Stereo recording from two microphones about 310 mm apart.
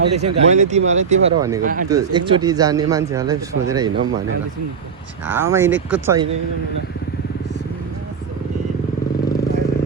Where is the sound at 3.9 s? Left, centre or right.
Right.